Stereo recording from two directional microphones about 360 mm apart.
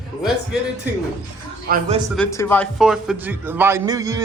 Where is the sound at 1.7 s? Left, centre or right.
Centre.